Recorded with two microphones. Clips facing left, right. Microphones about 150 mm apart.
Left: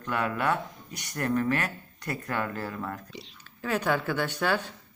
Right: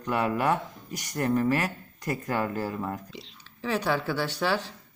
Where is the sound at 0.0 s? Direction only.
20° right (ahead or behind).